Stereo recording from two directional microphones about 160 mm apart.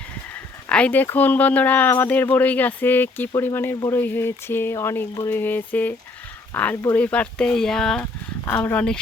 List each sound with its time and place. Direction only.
0.3 s speech: 10° left (ahead or behind)